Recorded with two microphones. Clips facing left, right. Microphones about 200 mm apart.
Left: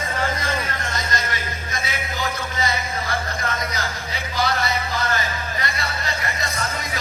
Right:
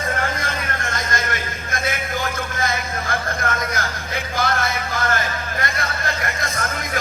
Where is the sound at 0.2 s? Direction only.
50° right (ahead or behind).